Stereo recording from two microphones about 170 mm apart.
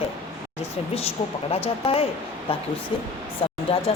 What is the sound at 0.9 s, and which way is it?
A woman's voice, 35° left (ahead or behind).